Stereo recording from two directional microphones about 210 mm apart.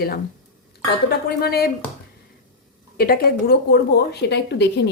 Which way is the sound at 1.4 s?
50° left (ahead or behind).